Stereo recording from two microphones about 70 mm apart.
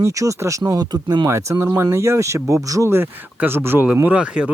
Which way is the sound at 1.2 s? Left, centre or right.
Right.